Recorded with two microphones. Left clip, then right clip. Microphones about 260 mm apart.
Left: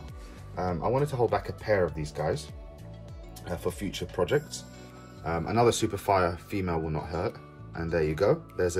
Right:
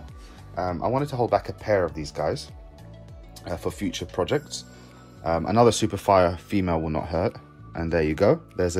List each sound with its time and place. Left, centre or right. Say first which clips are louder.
0.6 s speech: right 3 dB; right
3.6 s speech: right 2 dB; right